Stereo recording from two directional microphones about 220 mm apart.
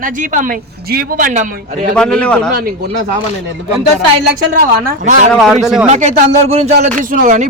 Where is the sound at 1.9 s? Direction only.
5° left (ahead or behind).